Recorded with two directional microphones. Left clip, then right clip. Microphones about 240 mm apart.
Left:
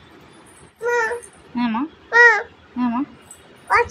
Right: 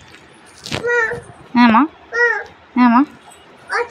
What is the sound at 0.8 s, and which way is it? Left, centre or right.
A child's voice, centre.